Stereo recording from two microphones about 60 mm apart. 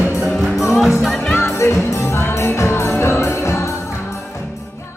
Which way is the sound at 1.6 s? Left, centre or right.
Left.